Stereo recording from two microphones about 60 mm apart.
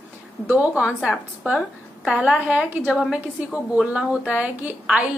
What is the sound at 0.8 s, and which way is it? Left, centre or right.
Speech, centre.